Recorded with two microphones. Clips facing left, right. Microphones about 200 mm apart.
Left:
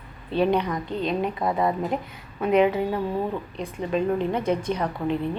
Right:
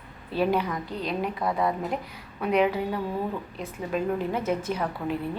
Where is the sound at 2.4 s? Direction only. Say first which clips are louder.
Left 4 dB; centre (ahead or behind).